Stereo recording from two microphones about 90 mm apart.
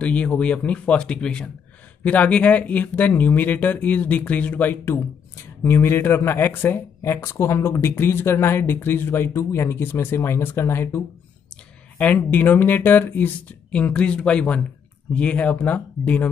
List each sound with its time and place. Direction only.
0.0 s speech: 15° left (ahead or behind)
12.0 s speech: 15° left (ahead or behind)